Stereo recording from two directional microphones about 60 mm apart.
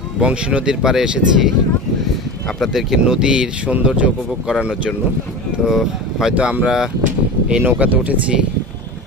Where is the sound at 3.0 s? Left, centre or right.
Centre.